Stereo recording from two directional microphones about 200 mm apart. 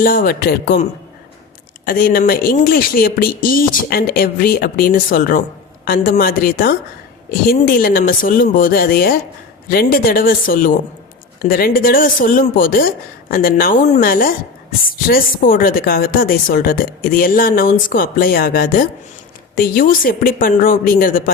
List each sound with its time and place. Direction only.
0.0 s a woman's voice: 45° left (ahead or behind)